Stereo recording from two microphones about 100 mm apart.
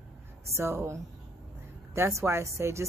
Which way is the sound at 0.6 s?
25° right (ahead or behind).